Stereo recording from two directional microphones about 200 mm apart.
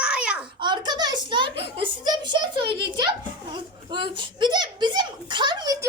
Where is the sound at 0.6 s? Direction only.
20° right (ahead or behind).